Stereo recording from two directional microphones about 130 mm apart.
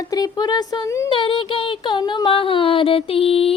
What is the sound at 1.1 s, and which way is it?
Music, 40° left (ahead or behind).